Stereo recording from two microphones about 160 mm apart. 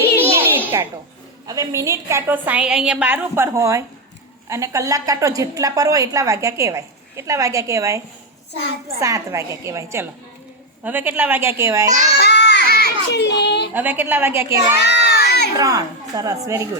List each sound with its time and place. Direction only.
0.3 s a sound: 15° right (ahead or behind)
1.5 s a woman's voice: 20° right (ahead or behind)
12.2 s a sound: 90° left
13.7 s a woman's voice: 10° right (ahead or behind)
14.8 s crowd: 90° left
15.5 s a woman's voice: 20° right (ahead or behind)